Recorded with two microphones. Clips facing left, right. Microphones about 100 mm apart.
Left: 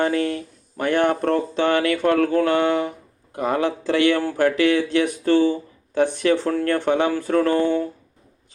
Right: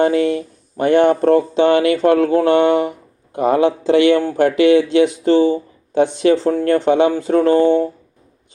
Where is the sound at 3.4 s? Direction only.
25° right (ahead or behind).